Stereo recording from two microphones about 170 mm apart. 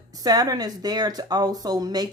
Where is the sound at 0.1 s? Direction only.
25° right (ahead or behind).